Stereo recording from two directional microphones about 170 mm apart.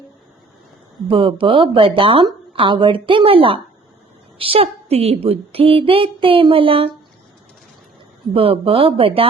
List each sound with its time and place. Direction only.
1.0 s speech: 30° right (ahead or behind)
8.3 s speech: 35° right (ahead or behind)